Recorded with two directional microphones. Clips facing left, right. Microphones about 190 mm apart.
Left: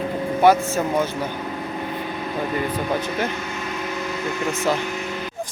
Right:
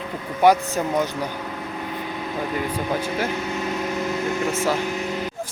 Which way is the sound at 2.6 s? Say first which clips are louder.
Left 1 dB; 10° right (ahead or behind).